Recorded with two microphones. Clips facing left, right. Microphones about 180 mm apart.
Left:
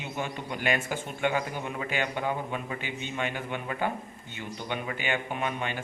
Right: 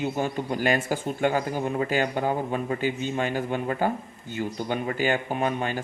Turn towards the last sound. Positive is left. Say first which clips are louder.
# right 5 dB
turn(degrees=-40)  # may be behind; listen again after turning